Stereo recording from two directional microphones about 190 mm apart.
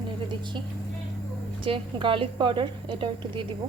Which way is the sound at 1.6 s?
25° right (ahead or behind).